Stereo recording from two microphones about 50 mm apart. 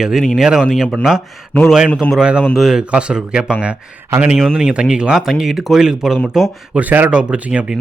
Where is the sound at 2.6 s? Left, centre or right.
Centre.